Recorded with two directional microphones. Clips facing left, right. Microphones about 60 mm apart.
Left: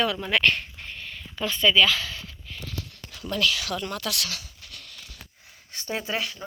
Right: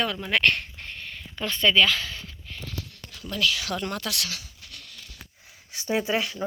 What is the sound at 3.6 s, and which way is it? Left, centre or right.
Speech, right.